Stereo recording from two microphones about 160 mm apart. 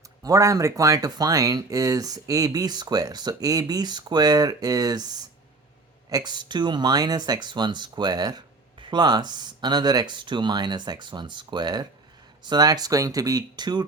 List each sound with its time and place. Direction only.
0.2 s speech: 20° right (ahead or behind)
6.1 s speech: 25° right (ahead or behind)